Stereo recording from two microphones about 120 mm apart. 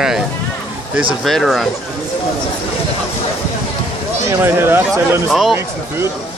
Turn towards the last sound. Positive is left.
turn(degrees=0)  # may be behind; listen again after turning